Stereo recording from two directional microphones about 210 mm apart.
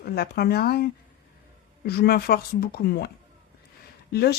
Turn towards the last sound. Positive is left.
turn(degrees=50)  # may be behind; listen again after turning